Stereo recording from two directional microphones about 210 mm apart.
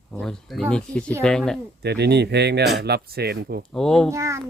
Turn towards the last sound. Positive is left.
turn(degrees=-15)  # may be behind; listen again after turning